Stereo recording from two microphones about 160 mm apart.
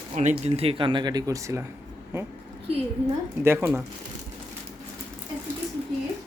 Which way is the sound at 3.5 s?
15° right (ahead or behind).